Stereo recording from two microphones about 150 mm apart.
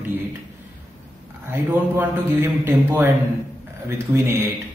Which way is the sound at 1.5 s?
15° right (ahead or behind).